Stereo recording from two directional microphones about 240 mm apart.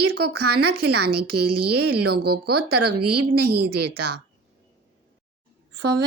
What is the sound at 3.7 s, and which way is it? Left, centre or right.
Speech, right.